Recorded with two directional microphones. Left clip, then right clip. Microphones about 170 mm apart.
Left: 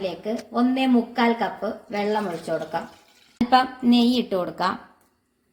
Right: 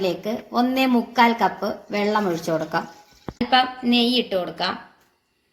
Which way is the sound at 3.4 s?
60° left (ahead or behind).